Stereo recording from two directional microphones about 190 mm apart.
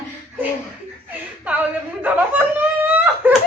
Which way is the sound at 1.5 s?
10° right (ahead or behind).